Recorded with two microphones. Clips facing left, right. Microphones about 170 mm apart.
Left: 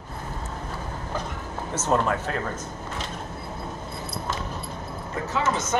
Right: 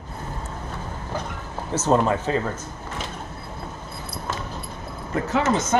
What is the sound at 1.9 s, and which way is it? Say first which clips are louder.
Speech: right 3 dB; 10° right (ahead or behind).